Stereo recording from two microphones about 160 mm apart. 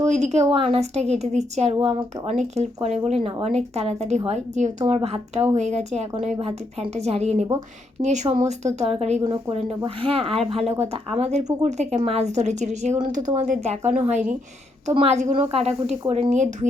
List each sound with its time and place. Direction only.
0.0 s a woman's voice: 45° right (ahead or behind)
15.0 s a woman's voice: 40° right (ahead or behind)